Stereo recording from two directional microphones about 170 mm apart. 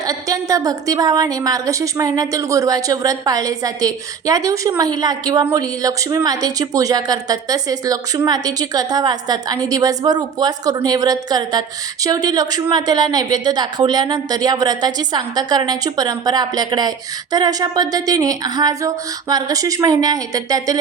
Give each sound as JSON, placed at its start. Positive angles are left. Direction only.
{"t": 0.0, "sound": "a woman's voice", "side_deg": -20}